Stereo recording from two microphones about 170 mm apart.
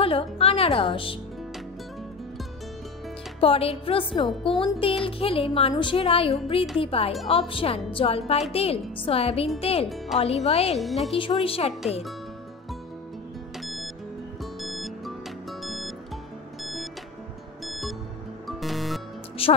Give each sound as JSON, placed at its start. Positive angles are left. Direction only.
{"t": 0.0, "sound": "speech", "side_deg": 35}
{"t": 3.3, "sound": "speech", "side_deg": 35}
{"t": 10.8, "sound": "speech", "side_deg": 0}
{"t": 11.1, "sound": "speech", "side_deg": 30}
{"t": 13.6, "sound": "music", "side_deg": 0}
{"t": 17.6, "sound": "music", "side_deg": 0}
{"t": 19.4, "sound": "music", "side_deg": 35}